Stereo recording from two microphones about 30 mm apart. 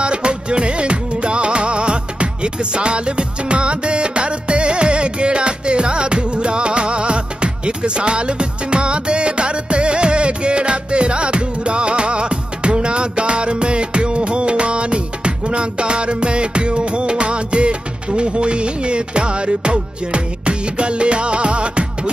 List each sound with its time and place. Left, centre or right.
0.0 s music: right